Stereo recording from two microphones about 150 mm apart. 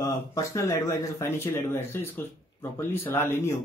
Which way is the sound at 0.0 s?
20° left (ahead or behind).